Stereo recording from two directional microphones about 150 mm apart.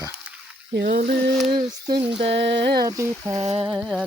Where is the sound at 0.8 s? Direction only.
70° right (ahead or behind).